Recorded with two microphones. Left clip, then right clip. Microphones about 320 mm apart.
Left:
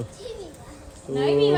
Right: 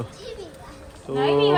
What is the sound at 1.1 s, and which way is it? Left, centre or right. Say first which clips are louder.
Speech: right 1 dB; centre.